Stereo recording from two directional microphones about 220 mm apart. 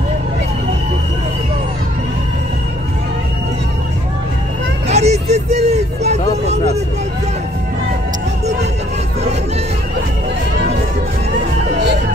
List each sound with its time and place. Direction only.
4.8 s vehicle: 30° right (ahead or behind)